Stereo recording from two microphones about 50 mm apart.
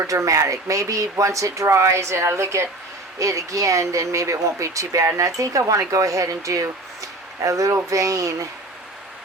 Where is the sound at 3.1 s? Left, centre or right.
Right.